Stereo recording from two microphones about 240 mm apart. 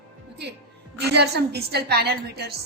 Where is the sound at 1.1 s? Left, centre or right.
Right.